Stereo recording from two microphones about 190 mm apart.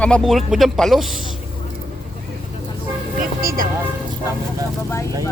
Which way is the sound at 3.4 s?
50° right (ahead or behind).